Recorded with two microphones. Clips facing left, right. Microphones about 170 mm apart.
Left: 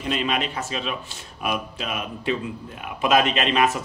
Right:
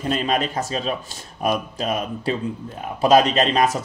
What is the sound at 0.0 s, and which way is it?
Speech, 40° right (ahead or behind).